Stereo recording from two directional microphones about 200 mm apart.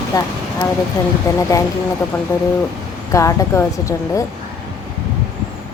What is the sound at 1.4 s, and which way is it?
Speech, 15° left (ahead or behind).